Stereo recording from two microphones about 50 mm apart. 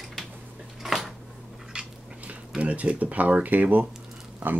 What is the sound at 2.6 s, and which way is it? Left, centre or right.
Speech, right.